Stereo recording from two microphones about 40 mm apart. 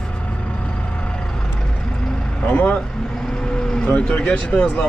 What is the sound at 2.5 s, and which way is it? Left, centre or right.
Speech, left.